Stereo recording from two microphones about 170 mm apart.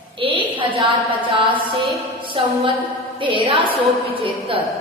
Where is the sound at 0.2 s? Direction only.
30° right (ahead or behind).